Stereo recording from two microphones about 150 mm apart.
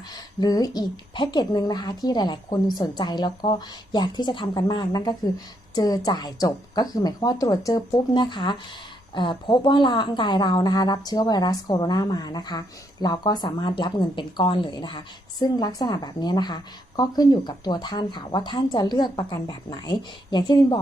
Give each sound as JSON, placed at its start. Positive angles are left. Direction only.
{"t": 0.3, "sound": "a woman's voice", "side_deg": 25}